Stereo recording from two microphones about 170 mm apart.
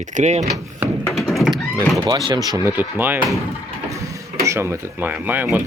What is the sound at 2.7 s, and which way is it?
Speech, 10° right (ahead or behind).